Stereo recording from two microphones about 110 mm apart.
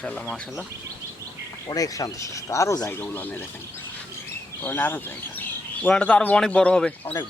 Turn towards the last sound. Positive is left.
turn(degrees=10)  # may be behind; listen again after turning